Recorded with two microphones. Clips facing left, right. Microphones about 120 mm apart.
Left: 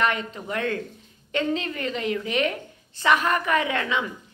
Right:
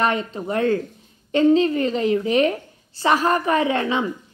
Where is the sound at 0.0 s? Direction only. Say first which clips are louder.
Right 4 dB; 35° right (ahead or behind).